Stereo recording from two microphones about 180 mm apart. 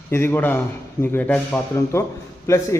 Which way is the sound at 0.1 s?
15° left (ahead or behind).